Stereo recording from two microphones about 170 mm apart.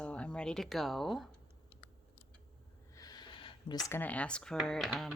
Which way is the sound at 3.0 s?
25° left (ahead or behind).